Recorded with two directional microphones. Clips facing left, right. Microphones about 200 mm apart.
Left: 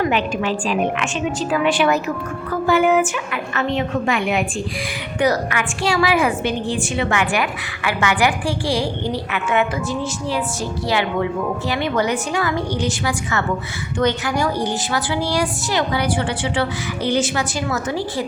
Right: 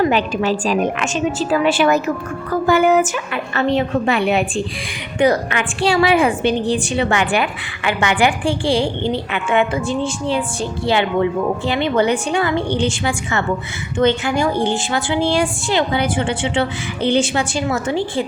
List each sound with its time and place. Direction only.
0.0 s a woman's voice: 35° right (ahead or behind)
3.3 s a woman's voice: 30° right (ahead or behind)